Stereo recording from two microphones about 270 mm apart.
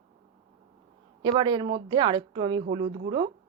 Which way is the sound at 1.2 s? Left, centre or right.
Centre.